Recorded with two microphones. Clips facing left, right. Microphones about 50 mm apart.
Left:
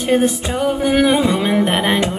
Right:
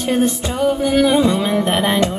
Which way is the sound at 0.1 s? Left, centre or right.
Centre.